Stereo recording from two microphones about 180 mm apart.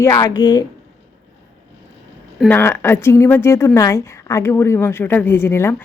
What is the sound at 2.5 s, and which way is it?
A woman's voice, 10° left (ahead or behind).